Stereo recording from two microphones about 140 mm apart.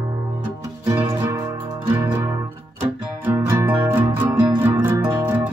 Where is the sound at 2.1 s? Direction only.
20° right (ahead or behind).